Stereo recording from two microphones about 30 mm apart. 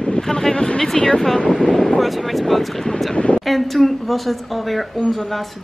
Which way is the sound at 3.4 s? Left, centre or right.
Centre.